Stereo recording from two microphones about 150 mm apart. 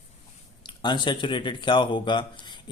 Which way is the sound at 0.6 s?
30° left (ahead or behind).